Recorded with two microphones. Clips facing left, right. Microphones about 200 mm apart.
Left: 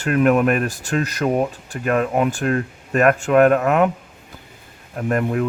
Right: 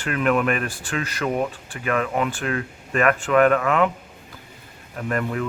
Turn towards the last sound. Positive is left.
turn(degrees=40)  # may be behind; listen again after turning